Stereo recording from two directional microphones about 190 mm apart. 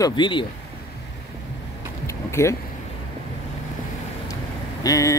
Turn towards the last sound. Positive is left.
turn(degrees=20)  # may be behind; listen again after turning